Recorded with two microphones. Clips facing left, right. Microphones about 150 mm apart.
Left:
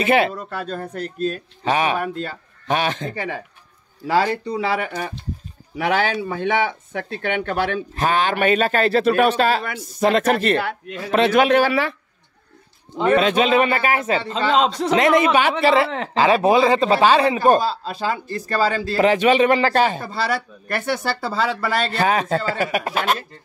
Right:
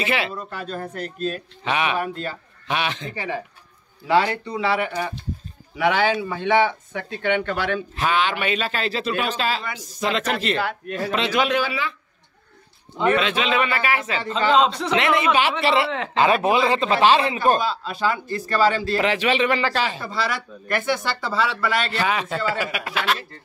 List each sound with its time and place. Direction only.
0.0 s a man's voice: 50° left (ahead or behind)
13.0 s a man's voice: 40° left (ahead or behind)